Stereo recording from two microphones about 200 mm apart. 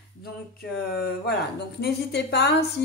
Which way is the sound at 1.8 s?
55° left (ahead or behind).